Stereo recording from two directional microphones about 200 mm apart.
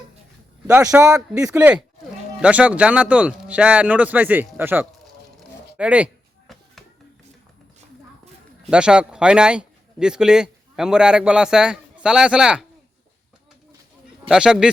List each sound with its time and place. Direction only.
0.7 s speech: 10° right (ahead or behind)
5.4 s a sound: 5° right (ahead or behind)
6.5 s hands: centre (ahead or behind)
8.7 s a man's voice: 5° right (ahead or behind)
14.3 s a man's voice: 5° right (ahead or behind)